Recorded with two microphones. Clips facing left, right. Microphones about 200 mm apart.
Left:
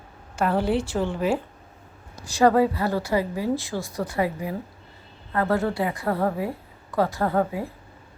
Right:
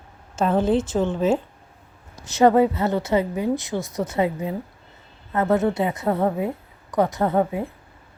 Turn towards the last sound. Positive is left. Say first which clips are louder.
# right 3 dB
turn(degrees=-20)  # may be behind; listen again after turning